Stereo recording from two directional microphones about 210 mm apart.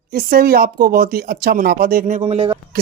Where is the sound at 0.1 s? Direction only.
45° right (ahead or behind).